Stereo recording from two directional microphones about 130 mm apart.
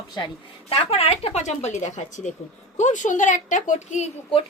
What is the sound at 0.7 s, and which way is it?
A woman's voice, 50° left (ahead or behind).